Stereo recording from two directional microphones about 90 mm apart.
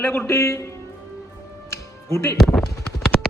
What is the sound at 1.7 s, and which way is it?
Music, 35° left (ahead or behind).